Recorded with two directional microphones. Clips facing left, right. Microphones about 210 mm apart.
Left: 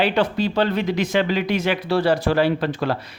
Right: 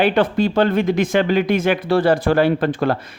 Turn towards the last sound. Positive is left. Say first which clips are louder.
# right 4 dB
turn(degrees=-50)  # may be behind; listen again after turning